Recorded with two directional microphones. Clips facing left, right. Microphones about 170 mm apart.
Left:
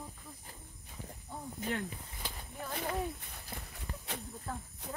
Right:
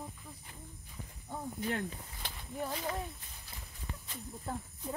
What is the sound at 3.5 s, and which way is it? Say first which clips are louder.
Walk: left 7 dB; 55° left (ahead or behind).